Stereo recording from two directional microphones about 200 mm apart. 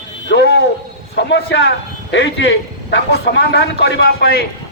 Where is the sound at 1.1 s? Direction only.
60° left (ahead or behind).